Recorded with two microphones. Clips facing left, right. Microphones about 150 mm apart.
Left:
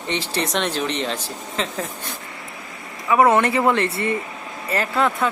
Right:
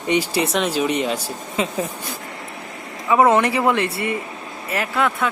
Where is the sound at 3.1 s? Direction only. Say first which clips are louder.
Right 1 dB; 20° right (ahead or behind).